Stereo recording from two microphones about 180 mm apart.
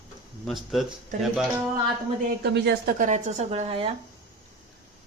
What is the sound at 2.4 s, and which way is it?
A woman's voice, 70° right (ahead or behind).